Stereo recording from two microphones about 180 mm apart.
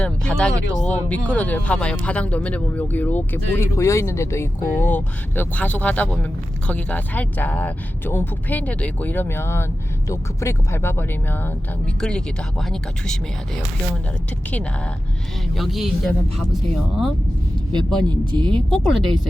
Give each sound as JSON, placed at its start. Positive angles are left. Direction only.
{"t": 0.0, "sound": "speech", "side_deg": 5}
{"t": 15.5, "sound": "speech", "side_deg": 0}
{"t": 18.3, "sound": "speech", "side_deg": -25}
{"t": 18.7, "sound": "speech", "side_deg": 0}